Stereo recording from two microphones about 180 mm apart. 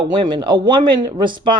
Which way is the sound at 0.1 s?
25° right (ahead or behind).